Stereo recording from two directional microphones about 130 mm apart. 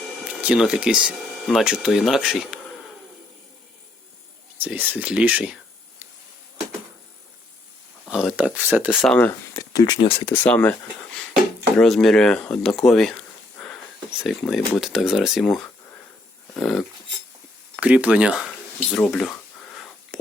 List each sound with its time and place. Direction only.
0.4 s speech: 5° right (ahead or behind)
4.5 s speech: 15° right (ahead or behind)
8.0 s speech: centre (ahead or behind)
9.0 s speech: 10° left (ahead or behind)
9.6 s speech: 30° left (ahead or behind)
10.2 s speech: 15° left (ahead or behind)
11.8 s speech: 5° left (ahead or behind)
14.2 s speech: centre (ahead or behind)
17.7 s speech: 10° right (ahead or behind)
18.9 s speech: 10° left (ahead or behind)
19.7 s whispering: centre (ahead or behind)